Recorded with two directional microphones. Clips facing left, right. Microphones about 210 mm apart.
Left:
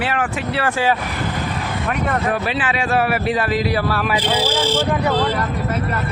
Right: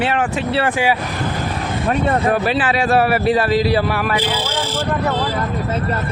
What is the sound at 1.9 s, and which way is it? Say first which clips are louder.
A man's voice: right 4 dB; 30° right (ahead or behind).